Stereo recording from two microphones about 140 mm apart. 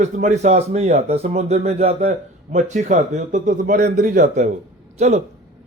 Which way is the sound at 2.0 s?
60° right (ahead or behind).